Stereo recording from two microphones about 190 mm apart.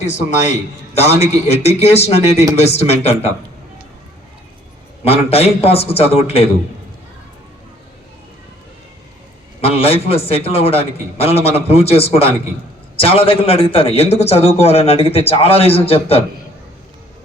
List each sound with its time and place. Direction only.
0.0 s a man's voice: 35° left (ahead or behind)
5.0 s a man's voice: 30° left (ahead or behind)
9.6 s a man's voice: 30° left (ahead or behind)